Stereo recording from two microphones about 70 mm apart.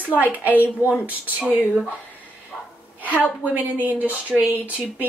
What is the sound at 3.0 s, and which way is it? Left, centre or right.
A woman's voice, right.